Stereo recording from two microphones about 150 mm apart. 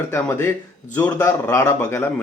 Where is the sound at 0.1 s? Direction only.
15° left (ahead or behind).